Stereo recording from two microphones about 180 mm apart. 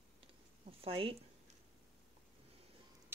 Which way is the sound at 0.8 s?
30° right (ahead or behind).